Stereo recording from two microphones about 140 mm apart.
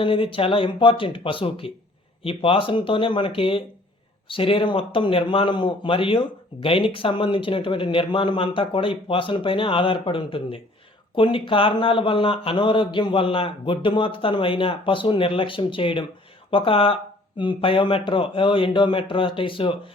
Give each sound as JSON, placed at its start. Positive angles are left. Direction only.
{"t": 0.0, "sound": "a man's voice", "side_deg": 40}